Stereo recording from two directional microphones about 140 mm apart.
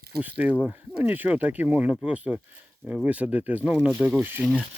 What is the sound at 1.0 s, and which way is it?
Speech, 10° right (ahead or behind).